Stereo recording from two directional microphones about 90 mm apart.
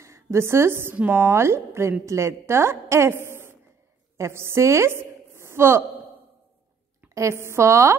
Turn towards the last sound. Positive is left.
turn(degrees=-35)  # may be behind; listen again after turning